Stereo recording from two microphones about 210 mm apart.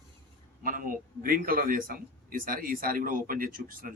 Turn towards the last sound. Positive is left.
turn(degrees=-45)  # may be behind; listen again after turning